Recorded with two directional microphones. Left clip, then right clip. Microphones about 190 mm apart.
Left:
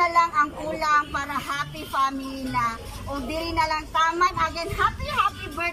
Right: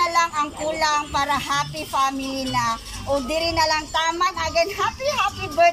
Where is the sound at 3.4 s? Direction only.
15° right (ahead or behind).